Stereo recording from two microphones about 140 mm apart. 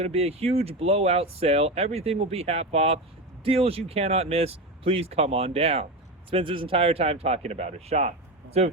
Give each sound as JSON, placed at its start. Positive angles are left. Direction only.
{"t": 0.0, "sound": "speech", "side_deg": -45}